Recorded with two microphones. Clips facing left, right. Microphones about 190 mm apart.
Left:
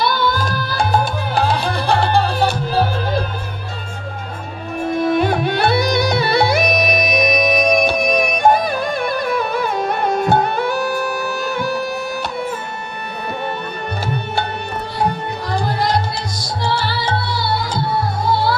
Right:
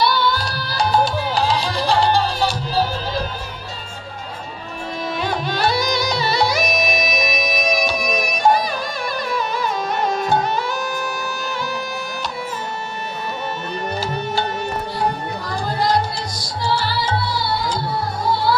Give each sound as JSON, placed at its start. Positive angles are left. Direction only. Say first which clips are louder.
{"t": 0.0, "sound": "music", "louder": "left 1 dB", "side_deg": 50}
{"t": 4.8, "sound": "music", "louder": "left 9 dB", "side_deg": 55}
{"t": 15.4, "sound": "music", "louder": "left 3 dB", "side_deg": 65}